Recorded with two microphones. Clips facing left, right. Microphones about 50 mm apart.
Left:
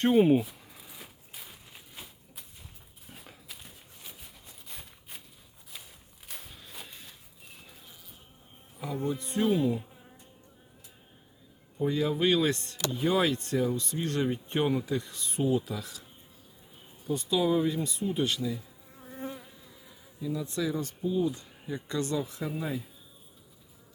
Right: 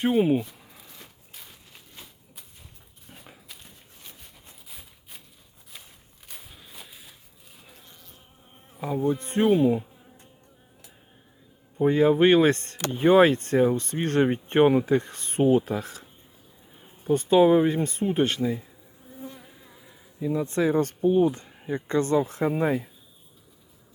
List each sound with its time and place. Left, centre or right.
0.0 s a sound: centre
3.1 s dog: centre
4.7 s a sound: centre
6.2 s insect: centre
9.0 s speech: right
9.5 s insect: centre
11.8 s speech: right
19.5 s insect: right
20.1 s speech: right
21.5 s speech: right